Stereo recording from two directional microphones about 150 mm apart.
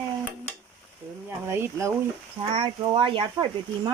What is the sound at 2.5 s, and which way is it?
Speech, 35° right (ahead or behind).